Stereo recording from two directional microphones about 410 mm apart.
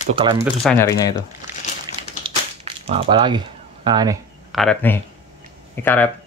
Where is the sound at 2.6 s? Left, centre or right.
Centre.